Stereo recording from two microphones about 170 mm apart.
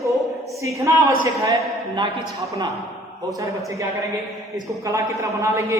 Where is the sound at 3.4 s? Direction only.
20° right (ahead or behind).